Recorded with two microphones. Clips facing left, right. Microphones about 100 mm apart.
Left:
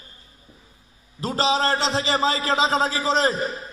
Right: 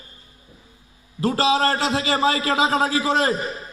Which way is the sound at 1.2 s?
25° left (ahead or behind).